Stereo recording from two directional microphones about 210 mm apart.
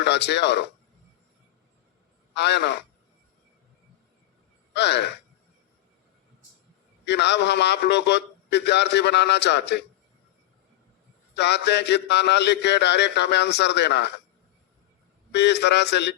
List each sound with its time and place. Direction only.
0.0 s a man's voice: 55° left (ahead or behind)
2.3 s a man's voice: 55° left (ahead or behind)
4.7 s speech: 55° left (ahead or behind)
7.0 s a man's voice: 55° left (ahead or behind)
11.3 s a man's voice: 55° left (ahead or behind)
15.3 s a man's voice: 55° left (ahead or behind)